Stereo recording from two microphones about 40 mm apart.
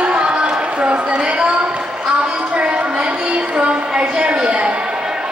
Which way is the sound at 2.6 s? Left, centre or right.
Right.